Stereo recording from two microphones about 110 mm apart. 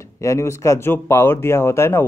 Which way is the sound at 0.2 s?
25° left (ahead or behind).